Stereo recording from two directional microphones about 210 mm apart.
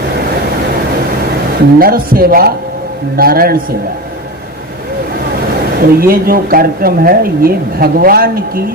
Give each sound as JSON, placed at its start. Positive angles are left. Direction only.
{"t": 1.8, "sound": "speech", "side_deg": -45}
{"t": 5.8, "sound": "speech", "side_deg": -45}